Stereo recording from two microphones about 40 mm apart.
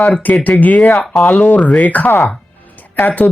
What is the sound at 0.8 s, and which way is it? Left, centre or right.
Speech, centre.